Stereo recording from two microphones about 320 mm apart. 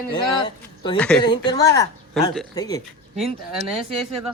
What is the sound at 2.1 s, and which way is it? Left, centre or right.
Speech, centre.